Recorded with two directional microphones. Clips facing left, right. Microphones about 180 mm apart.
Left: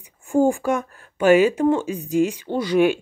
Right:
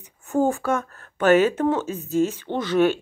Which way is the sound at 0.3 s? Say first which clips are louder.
Left 3 dB; 10° left (ahead or behind).